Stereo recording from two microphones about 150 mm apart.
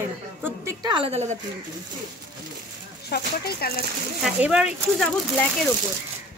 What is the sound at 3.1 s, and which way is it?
Speech, 90° left.